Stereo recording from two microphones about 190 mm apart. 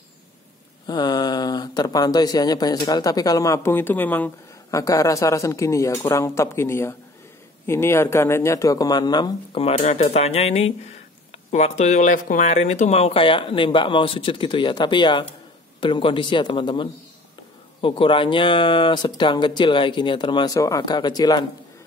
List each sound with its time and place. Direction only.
0.8 s speech: 20° left (ahead or behind)